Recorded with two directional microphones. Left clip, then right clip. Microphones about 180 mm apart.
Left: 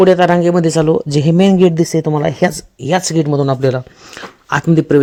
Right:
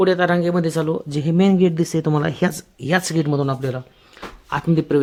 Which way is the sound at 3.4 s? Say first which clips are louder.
Left 9 dB; 30° left (ahead or behind).